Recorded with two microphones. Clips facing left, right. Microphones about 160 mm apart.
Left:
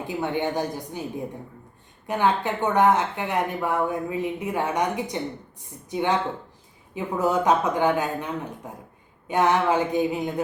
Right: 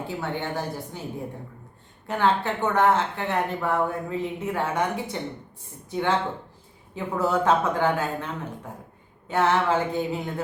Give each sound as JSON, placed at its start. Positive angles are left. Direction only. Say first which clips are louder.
{"t": 0.1, "sound": "speech", "louder": "left 6 dB", "side_deg": 15}
{"t": 2.0, "sound": "speech", "louder": "even", "side_deg": 15}